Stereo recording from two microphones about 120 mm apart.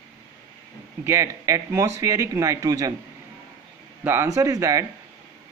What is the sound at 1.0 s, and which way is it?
A man's voice, 25° right (ahead or behind).